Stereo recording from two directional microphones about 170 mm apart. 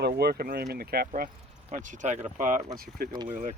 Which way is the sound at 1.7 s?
50° right (ahead or behind).